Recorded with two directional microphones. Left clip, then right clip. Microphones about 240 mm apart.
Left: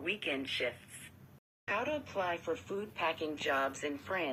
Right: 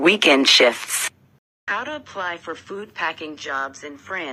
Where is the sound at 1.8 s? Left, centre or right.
Centre.